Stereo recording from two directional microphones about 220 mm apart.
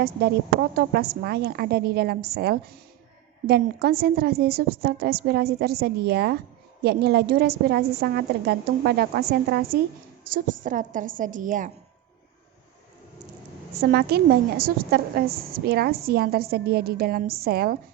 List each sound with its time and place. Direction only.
0.0 s a woman's voice: 45° right (ahead or behind)
13.8 s a woman's voice: 45° right (ahead or behind)